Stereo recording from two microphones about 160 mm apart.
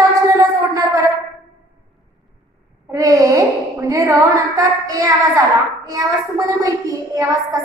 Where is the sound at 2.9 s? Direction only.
20° right (ahead or behind).